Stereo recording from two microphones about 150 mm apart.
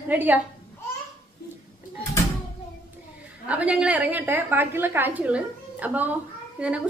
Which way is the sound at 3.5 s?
10° right (ahead or behind).